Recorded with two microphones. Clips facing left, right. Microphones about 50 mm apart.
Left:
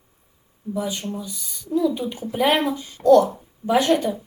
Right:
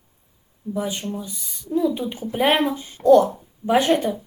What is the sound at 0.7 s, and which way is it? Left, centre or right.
A woman's voice, right.